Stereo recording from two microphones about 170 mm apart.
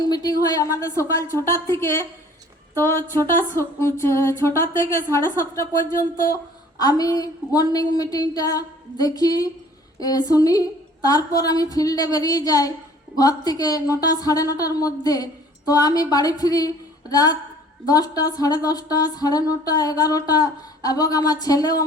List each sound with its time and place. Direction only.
0.0 s a woman's voice: 25° left (ahead or behind)
2.7 s a sound: 15° left (ahead or behind)
6.7 s a woman's voice: 20° left (ahead or behind)